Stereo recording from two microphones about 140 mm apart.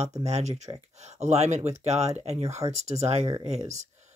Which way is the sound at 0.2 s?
50° right (ahead or behind).